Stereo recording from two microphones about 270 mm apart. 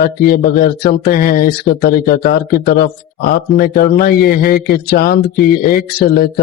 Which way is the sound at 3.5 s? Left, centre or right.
Left.